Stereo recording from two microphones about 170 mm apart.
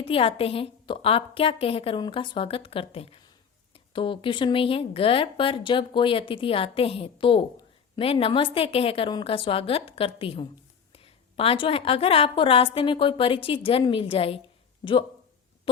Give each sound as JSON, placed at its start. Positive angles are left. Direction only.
{"t": 0.0, "sound": "speech", "side_deg": 35}